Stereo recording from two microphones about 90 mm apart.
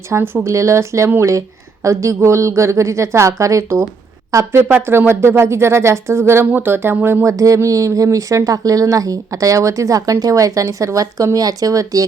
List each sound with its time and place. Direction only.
0.1 s speech: 25° right (ahead or behind)
0.4 s a woman's voice: 35° right (ahead or behind)
7.3 s a woman's voice: 40° right (ahead or behind)